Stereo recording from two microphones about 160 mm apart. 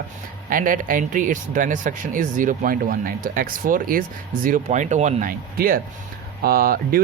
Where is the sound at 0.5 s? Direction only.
60° right (ahead or behind).